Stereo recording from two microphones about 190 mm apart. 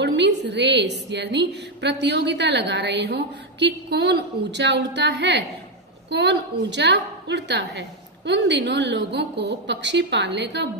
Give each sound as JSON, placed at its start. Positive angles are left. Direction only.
{"t": 0.0, "sound": "a woman's voice", "side_deg": -65}